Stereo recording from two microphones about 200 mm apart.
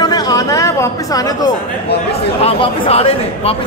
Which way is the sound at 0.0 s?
20° left (ahead or behind).